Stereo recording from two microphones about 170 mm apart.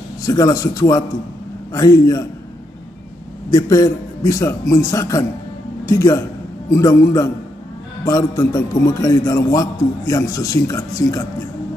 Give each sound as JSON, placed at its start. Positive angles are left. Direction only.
{"t": 0.2, "sound": "a man's voice", "side_deg": 20}
{"t": 3.4, "sound": "a man's voice", "side_deg": 20}